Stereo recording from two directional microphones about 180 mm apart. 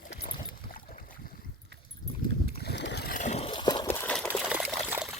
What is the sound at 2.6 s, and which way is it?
Boat, 70° left (ahead or behind).